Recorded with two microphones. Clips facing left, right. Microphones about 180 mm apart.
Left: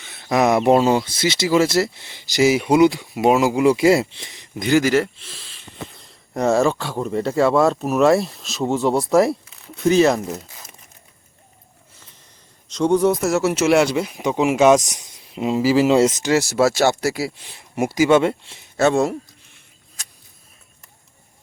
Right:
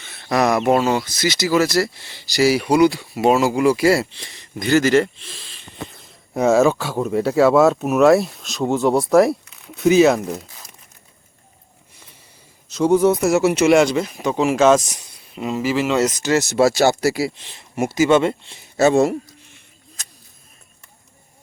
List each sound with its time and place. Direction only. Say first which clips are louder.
0.0 s speech: left 1 dB; 15° left (ahead or behind)
12.6 s speech: right 2 dB; 5° right (ahead or behind); by 15.6 s 20° left (ahead or behind)
15.6 s speech: left 4 dB; 35° left (ahead or behind)
16.2 s speech: right 1 dB; 10° left (ahead or behind)
17.4 s speech: even; 10° left (ahead or behind)